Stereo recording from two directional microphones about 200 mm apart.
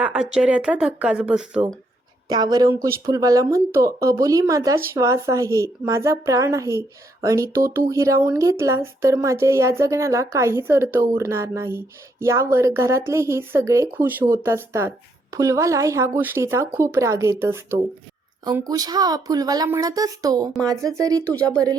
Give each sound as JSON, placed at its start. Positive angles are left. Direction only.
{"t": 0.0, "sound": "speech", "side_deg": -5}
{"t": 2.3, "sound": "speech", "side_deg": -20}